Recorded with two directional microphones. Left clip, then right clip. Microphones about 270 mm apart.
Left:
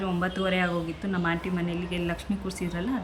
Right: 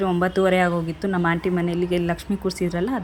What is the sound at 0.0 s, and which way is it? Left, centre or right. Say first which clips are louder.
Speech: right 9 dB; centre.